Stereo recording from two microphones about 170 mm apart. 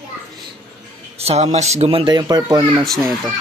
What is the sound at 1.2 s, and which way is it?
Speech, 40° right (ahead or behind).